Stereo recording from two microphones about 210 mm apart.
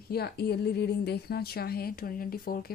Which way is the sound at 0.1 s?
50° left (ahead or behind).